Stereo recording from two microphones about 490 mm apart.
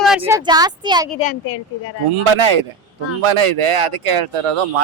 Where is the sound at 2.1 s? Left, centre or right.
Right.